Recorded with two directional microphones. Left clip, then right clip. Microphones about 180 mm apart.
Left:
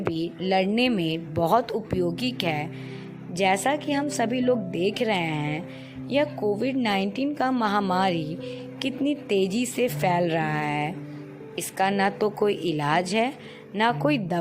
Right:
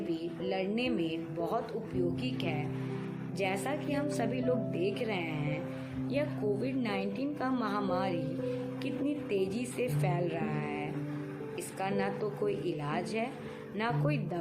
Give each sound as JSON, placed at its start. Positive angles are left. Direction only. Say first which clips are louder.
{"t": 0.2, "sound": "a woman's voice", "louder": "left 10 dB", "side_deg": 60}